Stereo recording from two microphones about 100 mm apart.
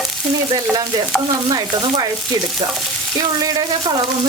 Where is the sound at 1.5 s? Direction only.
45° right (ahead or behind).